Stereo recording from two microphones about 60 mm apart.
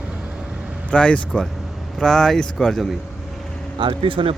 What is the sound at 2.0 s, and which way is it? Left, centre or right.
Speech, centre.